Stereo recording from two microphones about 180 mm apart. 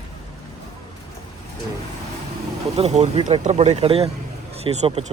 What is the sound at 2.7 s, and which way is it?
Speech, 35° right (ahead or behind).